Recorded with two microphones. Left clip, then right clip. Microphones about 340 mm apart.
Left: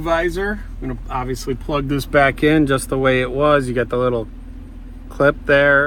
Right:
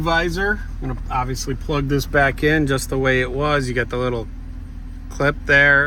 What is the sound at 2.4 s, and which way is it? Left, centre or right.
Speech, centre.